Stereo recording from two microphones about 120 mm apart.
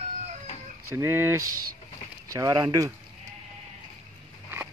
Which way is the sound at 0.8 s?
20° right (ahead or behind).